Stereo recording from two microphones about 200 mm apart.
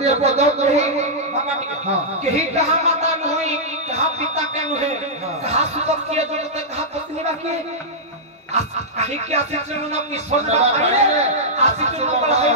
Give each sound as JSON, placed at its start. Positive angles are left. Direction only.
{"t": 0.0, "sound": "music", "side_deg": -35}
{"t": 2.3, "sound": "speech", "side_deg": -35}
{"t": 5.4, "sound": "music", "side_deg": -35}
{"t": 8.5, "sound": "music", "side_deg": -35}